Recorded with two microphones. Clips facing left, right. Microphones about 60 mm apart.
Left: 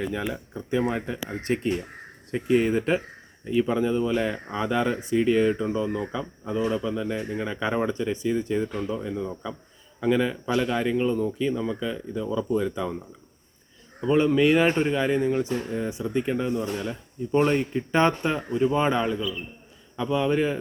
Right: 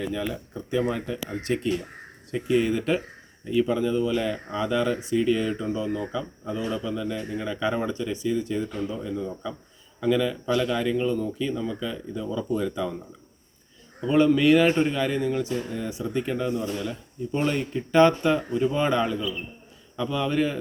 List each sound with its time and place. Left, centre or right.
0.5 s speech: left
14.0 s speech: left
16.6 s speech: left
17.9 s speech: left